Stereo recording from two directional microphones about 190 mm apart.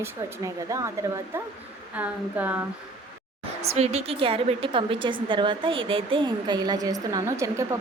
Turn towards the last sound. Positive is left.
turn(degrees=-15)  # may be behind; listen again after turning